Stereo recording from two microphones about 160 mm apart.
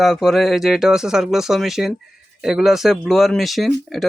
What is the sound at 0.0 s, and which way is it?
Speech, centre (ahead or behind).